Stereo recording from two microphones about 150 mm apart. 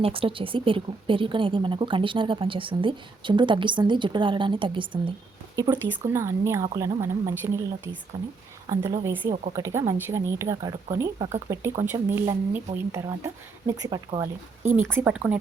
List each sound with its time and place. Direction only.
0.0 s a woman's voice: 35° right (ahead or behind)
6.0 s speech: 20° right (ahead or behind)
9.3 s a woman's voice: 50° right (ahead or behind)
9.6 s speech: 20° right (ahead or behind)